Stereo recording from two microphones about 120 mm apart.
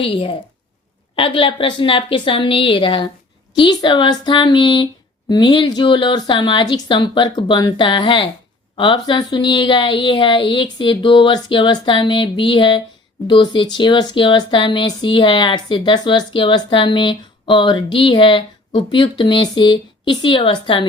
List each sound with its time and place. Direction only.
0.0 s speech: 50° left (ahead or behind)